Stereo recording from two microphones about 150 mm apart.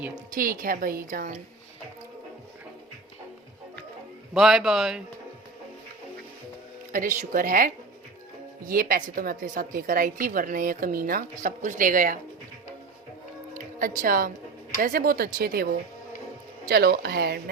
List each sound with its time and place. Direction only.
0.3 s a woman's voice: 65° right (ahead or behind)
4.4 s a man's voice: 5° right (ahead or behind)
6.9 s a woman's voice: 60° right (ahead or behind)
13.5 s a woman's voice: 65° right (ahead or behind); by 15.7 s 80° right
16.6 s speech: 90° right